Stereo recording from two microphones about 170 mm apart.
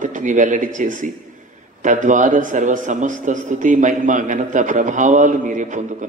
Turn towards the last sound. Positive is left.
turn(degrees=-45)  # may be behind; listen again after turning